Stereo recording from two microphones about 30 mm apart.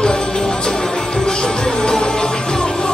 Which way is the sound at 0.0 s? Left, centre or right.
Left.